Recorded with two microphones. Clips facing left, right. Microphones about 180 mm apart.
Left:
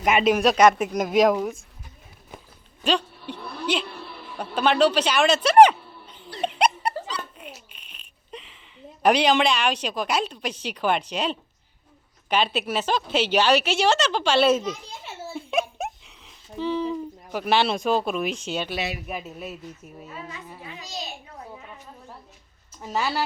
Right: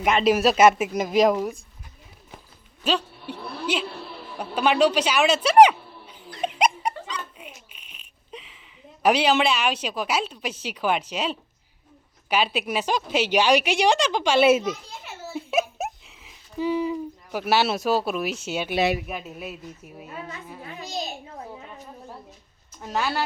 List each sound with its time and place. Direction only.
0.1 s speech: 5° left (ahead or behind)
0.3 s speech: 5° right (ahead or behind)
2.8 s a sound: 5° right (ahead or behind)
7.1 s dog: 10° right (ahead or behind)
7.7 s a sound: 10° right (ahead or behind)
9.0 s a woman's voice: 5° right (ahead or behind)
20.7 s a child's voice: 50° right (ahead or behind)
22.8 s speech: 5° left (ahead or behind)